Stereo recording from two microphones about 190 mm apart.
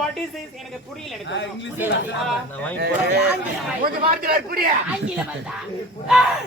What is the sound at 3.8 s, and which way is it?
Speech, 45° right (ahead or behind).